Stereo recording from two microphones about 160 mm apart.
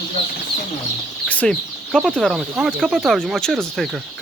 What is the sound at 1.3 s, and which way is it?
Speech, 5° left (ahead or behind).